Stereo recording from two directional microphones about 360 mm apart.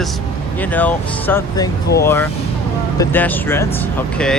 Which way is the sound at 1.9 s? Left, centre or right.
Left.